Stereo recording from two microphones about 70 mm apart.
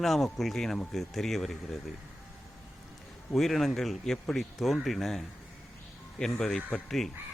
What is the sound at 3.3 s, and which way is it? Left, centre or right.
Speech, centre.